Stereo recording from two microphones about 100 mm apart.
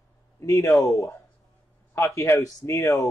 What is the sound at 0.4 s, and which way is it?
Speech, 30° left (ahead or behind).